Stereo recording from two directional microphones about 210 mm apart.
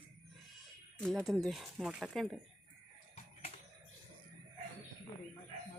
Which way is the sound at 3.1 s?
30° left (ahead or behind).